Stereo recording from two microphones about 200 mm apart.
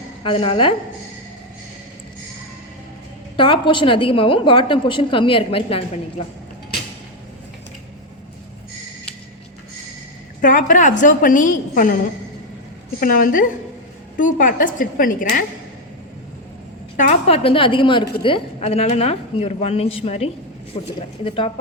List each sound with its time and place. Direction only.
0.2 s a woman's voice: 25° left (ahead or behind)
3.3 s a woman's voice: 25° left (ahead or behind)
10.4 s a woman's voice: 40° left (ahead or behind)
13.0 s a woman's voice: 45° left (ahead or behind)
17.0 s a woman's voice: 35° left (ahead or behind)